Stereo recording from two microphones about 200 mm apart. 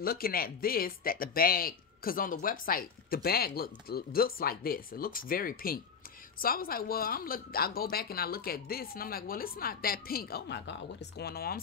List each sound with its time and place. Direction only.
0.0 s speech: 50° left (ahead or behind)